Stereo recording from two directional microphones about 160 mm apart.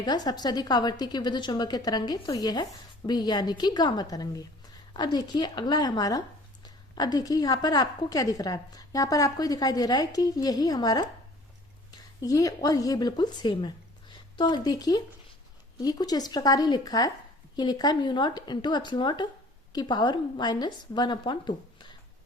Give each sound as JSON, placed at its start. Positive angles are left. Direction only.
{"t": 0.0, "sound": "a woman's voice", "side_deg": 25}